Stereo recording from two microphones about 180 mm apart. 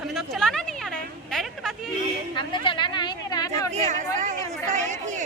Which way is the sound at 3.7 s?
40° right (ahead or behind).